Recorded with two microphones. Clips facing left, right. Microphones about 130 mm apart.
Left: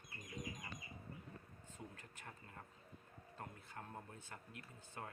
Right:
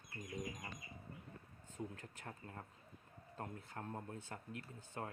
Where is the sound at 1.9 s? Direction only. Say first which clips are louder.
Right 5 dB; 35° right (ahead or behind).